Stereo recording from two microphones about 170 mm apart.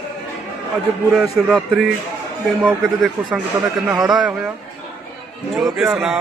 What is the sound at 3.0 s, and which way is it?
Speech, centre (ahead or behind).